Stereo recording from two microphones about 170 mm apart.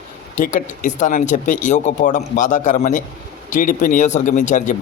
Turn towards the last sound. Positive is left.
turn(degrees=45)  # may be behind; listen again after turning